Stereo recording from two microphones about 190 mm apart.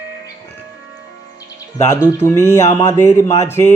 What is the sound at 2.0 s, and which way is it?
Speech, 15° left (ahead or behind).